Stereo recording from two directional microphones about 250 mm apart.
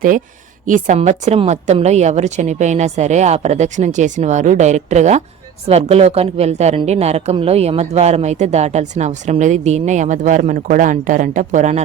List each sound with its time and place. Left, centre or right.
0.6 s speech: right